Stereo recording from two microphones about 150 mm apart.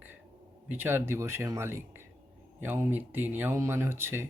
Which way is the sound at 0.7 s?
15° right (ahead or behind).